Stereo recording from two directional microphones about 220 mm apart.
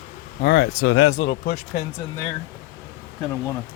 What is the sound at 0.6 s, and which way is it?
Speech, 65° left (ahead or behind).